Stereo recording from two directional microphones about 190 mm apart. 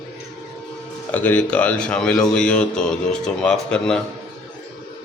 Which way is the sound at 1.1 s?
10° left (ahead or behind).